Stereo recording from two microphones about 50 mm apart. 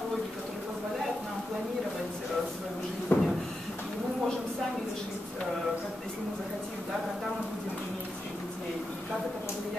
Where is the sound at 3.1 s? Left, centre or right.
Left.